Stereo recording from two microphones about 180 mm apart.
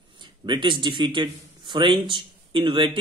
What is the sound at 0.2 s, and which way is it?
A man's voice, 25° right (ahead or behind).